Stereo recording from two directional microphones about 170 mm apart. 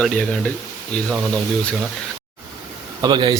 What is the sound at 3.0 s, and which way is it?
Speech, 25° right (ahead or behind).